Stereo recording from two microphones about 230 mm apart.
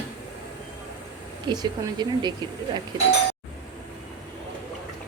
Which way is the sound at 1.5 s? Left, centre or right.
Centre.